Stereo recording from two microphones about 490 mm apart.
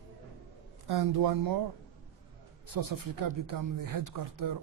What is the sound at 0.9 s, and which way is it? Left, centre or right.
Speech, right.